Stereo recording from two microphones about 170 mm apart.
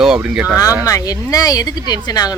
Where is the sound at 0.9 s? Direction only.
20° left (ahead or behind).